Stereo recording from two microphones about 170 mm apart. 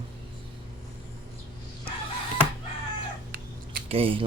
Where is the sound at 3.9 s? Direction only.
35° right (ahead or behind).